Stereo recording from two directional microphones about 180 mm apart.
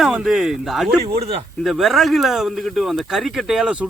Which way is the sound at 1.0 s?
35° right (ahead or behind).